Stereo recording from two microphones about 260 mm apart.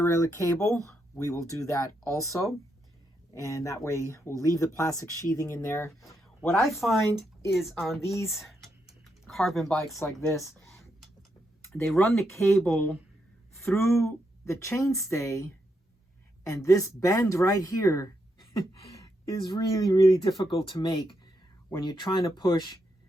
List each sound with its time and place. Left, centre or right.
0.0 s speech: centre
8.4 s typing: centre
10.1 s speech: centre
11.6 s speech: centre
16.6 s speech: centre